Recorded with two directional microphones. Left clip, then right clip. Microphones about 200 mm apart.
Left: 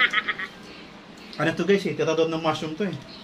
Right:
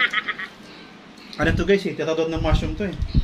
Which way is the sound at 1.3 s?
25° right (ahead or behind).